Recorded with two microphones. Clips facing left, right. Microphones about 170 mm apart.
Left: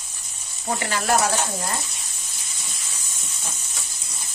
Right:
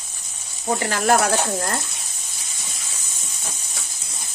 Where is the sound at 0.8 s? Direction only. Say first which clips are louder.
Right 3 dB; 55° right (ahead or behind).